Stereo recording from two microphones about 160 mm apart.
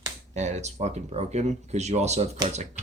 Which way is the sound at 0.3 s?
45° right (ahead or behind).